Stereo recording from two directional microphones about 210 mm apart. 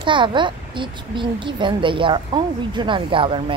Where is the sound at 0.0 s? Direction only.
25° right (ahead or behind).